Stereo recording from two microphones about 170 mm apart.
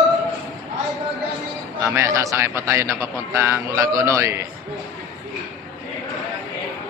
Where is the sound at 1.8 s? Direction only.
15° right (ahead or behind).